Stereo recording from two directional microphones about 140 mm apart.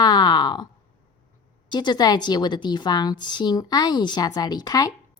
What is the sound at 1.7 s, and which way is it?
A woman's voice, 30° left (ahead or behind).